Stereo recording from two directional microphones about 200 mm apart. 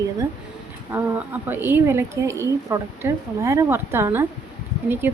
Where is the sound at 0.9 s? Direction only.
10° right (ahead or behind).